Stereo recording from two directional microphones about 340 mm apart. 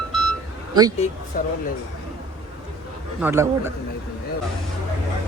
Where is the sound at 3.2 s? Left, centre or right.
Centre.